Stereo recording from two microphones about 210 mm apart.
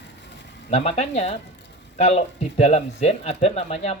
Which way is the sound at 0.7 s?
30° left (ahead or behind).